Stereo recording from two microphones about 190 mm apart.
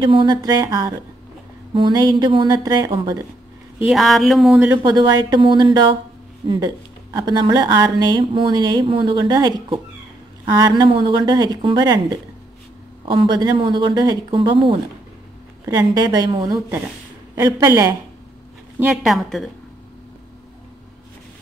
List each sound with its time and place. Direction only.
0.0 s speech: 25° right (ahead or behind)
3.8 s a woman's voice: centre (ahead or behind)
4.6 s a woman's voice: 10° right (ahead or behind)
4.9 s a woman's voice: 20° right (ahead or behind)
18.8 s a woman's voice: centre (ahead or behind)